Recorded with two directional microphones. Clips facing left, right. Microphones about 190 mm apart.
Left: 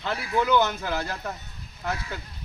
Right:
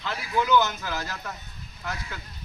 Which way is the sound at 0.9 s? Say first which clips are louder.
Left 4 dB; 30° left (ahead or behind).